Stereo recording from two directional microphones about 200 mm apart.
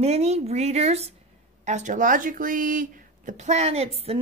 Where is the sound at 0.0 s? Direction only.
30° right (ahead or behind).